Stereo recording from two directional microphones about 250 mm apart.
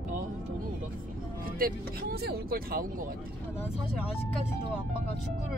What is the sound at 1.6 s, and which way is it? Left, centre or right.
Speech, right.